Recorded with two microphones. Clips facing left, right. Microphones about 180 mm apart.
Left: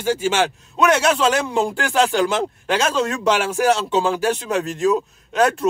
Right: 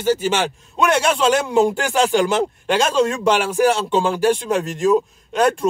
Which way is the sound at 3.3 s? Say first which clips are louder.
Right 1 dB; 10° right (ahead or behind).